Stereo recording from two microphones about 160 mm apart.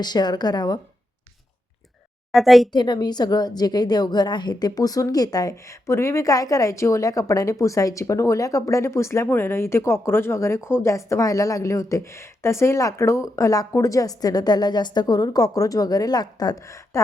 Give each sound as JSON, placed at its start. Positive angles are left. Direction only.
{"t": 0.0, "sound": "a woman's voice", "side_deg": 25}
{"t": 2.3, "sound": "a woman's voice", "side_deg": 0}
{"t": 2.7, "sound": "a woman's voice", "side_deg": 25}